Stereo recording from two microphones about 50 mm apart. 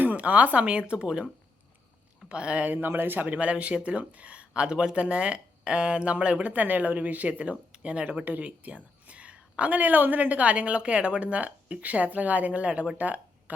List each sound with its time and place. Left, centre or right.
0.0 s a woman's voice: right
2.3 s a woman's voice: right
2.6 s a woman's voice: right